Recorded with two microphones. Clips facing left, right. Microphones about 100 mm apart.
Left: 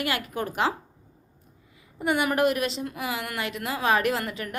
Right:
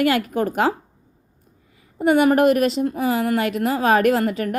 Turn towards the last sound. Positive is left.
turn(degrees=-45)  # may be behind; listen again after turning